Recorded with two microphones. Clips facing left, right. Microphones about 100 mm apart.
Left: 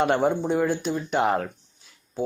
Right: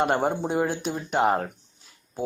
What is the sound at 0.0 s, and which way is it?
Speech, 5° right (ahead or behind).